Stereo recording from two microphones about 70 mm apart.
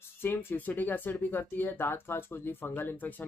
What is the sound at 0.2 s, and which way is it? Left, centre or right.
Speech, left.